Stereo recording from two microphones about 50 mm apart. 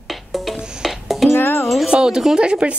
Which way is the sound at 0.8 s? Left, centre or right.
Centre.